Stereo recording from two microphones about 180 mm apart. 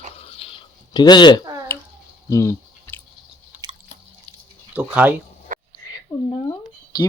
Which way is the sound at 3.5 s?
10° right (ahead or behind).